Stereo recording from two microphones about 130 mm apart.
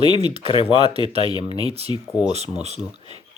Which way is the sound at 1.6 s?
50° right (ahead or behind).